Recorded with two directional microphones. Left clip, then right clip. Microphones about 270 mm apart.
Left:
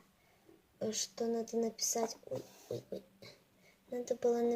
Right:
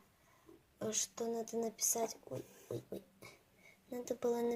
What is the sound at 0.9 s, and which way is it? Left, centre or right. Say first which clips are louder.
Speech: left 2 dB; centre.